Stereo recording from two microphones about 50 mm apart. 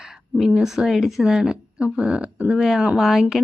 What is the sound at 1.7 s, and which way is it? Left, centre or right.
A woman's voice, right.